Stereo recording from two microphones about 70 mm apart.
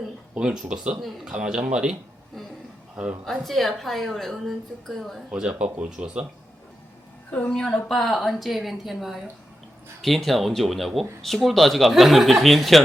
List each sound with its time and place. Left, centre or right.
0.3 s speech: centre
3.2 s a woman's voice: centre
5.3 s speech: centre
7.3 s a woman's voice: left
7.5 s a woman's voice: centre